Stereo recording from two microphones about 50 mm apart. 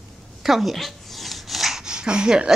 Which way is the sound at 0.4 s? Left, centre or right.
Centre.